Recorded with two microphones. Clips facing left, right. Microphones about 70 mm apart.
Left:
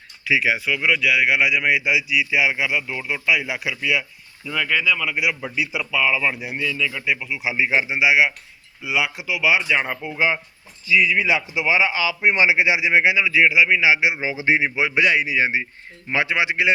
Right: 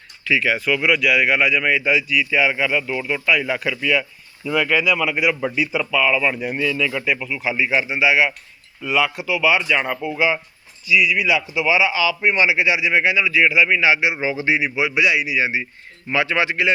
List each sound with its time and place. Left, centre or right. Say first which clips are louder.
0.3 s speech: right 1 dB; centre
0.6 s speech: right 2 dB; centre
4.7 s speech: right 1 dB; centre
5.0 s a man's voice: right 4 dB; centre
6.7 s a man's voice: right 1 dB; centre
7.5 s a man's voice: even; left
10.8 s speech: right 1 dB; left
12.2 s a man's voice: left 2 dB; left
14.5 s speech: left 3 dB; left
16.0 s a man's voice: right 2 dB; left